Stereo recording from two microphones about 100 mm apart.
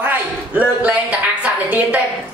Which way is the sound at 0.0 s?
15° right (ahead or behind).